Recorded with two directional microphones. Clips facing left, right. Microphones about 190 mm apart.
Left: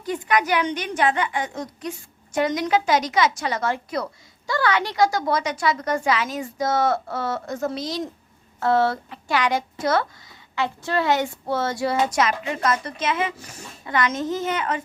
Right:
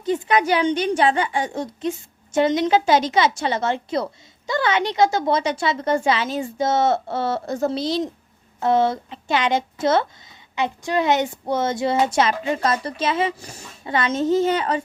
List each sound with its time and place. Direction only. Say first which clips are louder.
0.0 s a woman's voice: right 3 dB; 25° right (ahead or behind)